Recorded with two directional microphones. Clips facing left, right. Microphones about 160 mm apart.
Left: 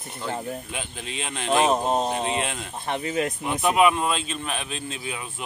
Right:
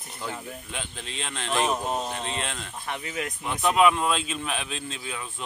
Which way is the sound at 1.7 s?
30° left (ahead or behind).